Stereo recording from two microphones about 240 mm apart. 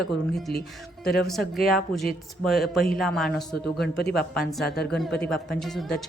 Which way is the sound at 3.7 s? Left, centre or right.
Left.